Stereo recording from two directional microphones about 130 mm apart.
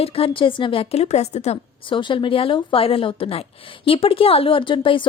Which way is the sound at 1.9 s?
40° left (ahead or behind).